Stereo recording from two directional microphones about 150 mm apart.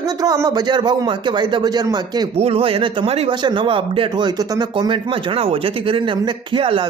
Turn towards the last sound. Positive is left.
turn(degrees=-35)  # may be behind; listen again after turning